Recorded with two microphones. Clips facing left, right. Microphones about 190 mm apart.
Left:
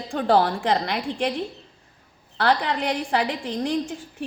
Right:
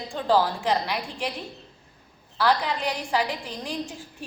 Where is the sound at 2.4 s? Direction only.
60° left (ahead or behind).